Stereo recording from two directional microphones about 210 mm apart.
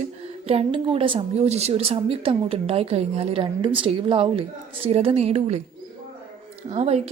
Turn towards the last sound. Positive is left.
turn(degrees=-30)  # may be behind; listen again after turning